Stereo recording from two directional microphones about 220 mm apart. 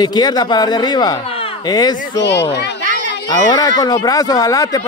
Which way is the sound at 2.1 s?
50° left (ahead or behind).